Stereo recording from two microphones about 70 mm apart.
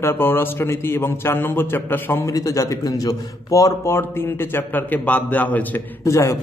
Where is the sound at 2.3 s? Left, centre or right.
Left.